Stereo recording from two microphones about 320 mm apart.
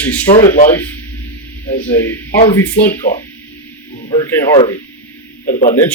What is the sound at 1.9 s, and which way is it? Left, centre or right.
Speech, centre.